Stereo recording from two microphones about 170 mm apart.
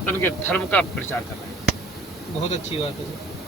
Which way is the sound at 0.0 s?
10° left (ahead or behind).